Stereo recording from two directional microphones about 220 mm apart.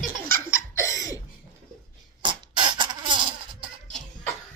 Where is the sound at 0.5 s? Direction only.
15° left (ahead or behind).